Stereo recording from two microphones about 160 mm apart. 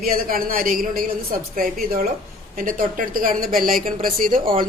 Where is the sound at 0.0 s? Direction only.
65° right (ahead or behind).